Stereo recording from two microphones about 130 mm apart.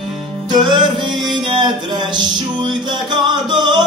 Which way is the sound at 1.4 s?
40° right (ahead or behind).